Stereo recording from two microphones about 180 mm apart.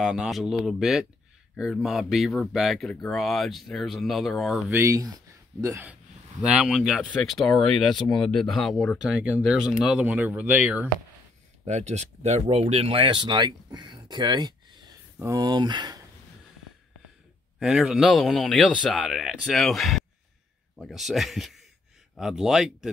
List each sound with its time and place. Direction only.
0.0 s speech: 5° right (ahead or behind)
4.6 s speech: 15° right (ahead or behind)
6.4 s speech: 5° right (ahead or behind)
11.6 s speech: 40° right (ahead or behind)
17.6 s speech: centre (ahead or behind)